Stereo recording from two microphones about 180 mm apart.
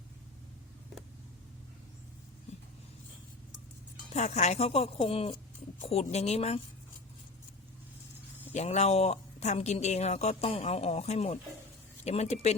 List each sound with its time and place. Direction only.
4.1 s speech: 40° left (ahead or behind)
8.5 s speech: 40° left (ahead or behind)